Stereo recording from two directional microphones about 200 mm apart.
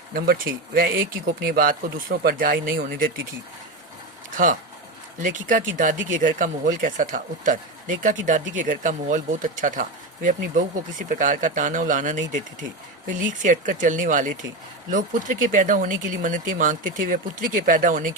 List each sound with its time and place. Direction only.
0.1 s speech: 50° right (ahead or behind)
5.2 s speech: 40° right (ahead or behind)